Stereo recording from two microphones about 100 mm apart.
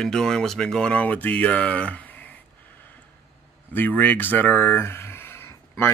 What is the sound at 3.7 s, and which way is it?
Speech, 15° left (ahead or behind).